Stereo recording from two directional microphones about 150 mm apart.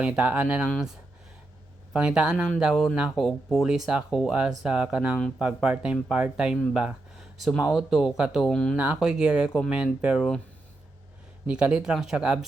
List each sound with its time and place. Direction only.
0.0 s speech: 10° right (ahead or behind)
8.7 s speech: 5° right (ahead or behind)
11.4 s speech: 5° right (ahead or behind)